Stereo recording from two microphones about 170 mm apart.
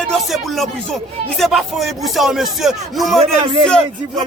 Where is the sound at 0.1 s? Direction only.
Centre (ahead or behind).